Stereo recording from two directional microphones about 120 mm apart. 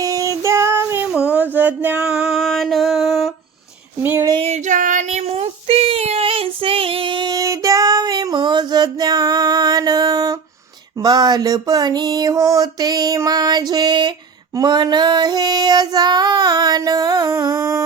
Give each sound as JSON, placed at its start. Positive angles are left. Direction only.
{"t": 0.0, "sound": "child singing", "side_deg": -30}
{"t": 1.1, "sound": "a sound", "side_deg": -10}
{"t": 2.0, "sound": "music", "side_deg": -5}
{"t": 4.0, "sound": "a sound", "side_deg": -20}
{"t": 4.4, "sound": "female singing", "side_deg": -65}
{"t": 5.3, "sound": "child singing", "side_deg": -55}
{"t": 11.0, "sound": "female singing", "side_deg": -35}